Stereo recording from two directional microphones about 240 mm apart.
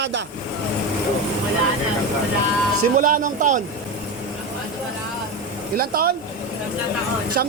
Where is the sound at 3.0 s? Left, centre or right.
Right.